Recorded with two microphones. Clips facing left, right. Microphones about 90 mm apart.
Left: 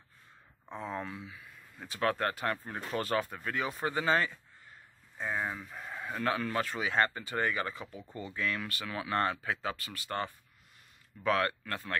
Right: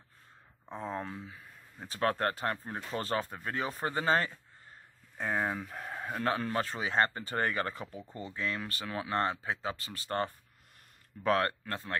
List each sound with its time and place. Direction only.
0.7 s speech: 35° right (ahead or behind)
5.4 s speech: 55° right (ahead or behind)
11.6 s speech: 25° right (ahead or behind)